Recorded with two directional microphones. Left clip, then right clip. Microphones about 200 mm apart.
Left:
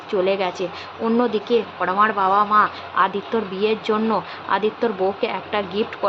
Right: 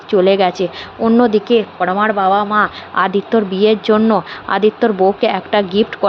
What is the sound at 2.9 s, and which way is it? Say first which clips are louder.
Speech: right 5 dB; 30° right (ahead or behind).